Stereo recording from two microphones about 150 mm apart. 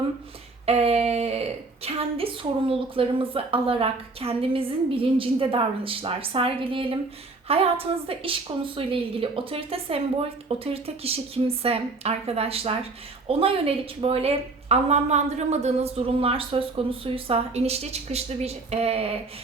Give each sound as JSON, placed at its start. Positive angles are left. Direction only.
{"t": 0.6, "sound": "speech", "side_deg": -45}